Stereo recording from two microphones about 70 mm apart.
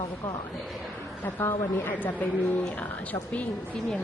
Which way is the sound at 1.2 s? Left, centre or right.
Left.